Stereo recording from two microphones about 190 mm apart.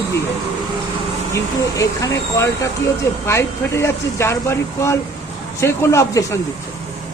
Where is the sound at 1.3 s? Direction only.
15° left (ahead or behind).